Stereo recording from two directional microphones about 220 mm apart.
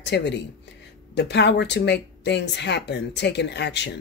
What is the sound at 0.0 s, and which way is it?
Speech, 50° left (ahead or behind).